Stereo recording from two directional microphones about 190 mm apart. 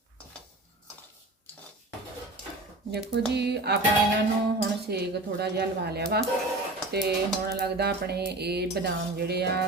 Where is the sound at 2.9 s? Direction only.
60° right (ahead or behind).